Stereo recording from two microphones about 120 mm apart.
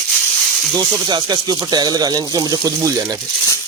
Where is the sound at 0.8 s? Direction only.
35° right (ahead or behind).